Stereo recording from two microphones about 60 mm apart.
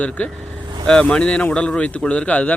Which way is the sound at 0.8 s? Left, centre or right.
Centre.